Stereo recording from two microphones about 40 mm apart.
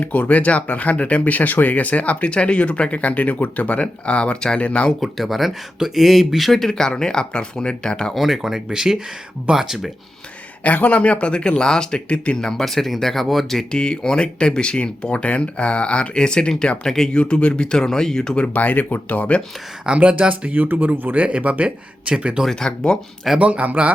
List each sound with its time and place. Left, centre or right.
0.0 s speech: left
4.9 s speech: centre
6.7 s speech: centre
8.1 s speech: centre
10.6 s speech: left
12.4 s speech: centre
13.7 s speech: left
17.2 s speech: left
18.3 s speech: left
20.0 s speech: right
20.5 s speech: right
21.2 s speech: right
22.4 s speech: centre
23.4 s speech: right